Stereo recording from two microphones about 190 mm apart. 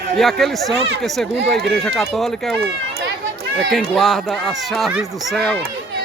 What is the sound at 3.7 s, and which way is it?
Speech, centre (ahead or behind).